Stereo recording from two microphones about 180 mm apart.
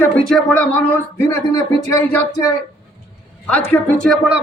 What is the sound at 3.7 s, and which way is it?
Speech, 5° left (ahead or behind).